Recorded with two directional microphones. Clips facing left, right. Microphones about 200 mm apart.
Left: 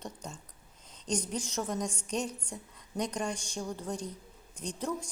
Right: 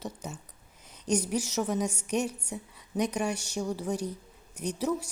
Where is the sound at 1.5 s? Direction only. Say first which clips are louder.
Right 3 dB; 5° right (ahead or behind).